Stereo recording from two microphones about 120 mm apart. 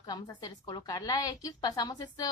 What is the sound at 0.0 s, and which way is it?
A woman's voice, 35° left (ahead or behind).